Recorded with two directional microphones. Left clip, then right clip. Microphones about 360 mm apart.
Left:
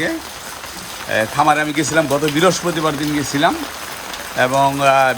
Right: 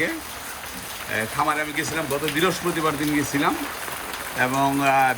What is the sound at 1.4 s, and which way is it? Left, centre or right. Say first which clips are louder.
Speech: left 8 dB; centre.